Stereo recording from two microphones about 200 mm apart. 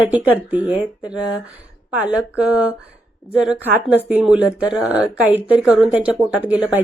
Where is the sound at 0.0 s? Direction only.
10° right (ahead or behind).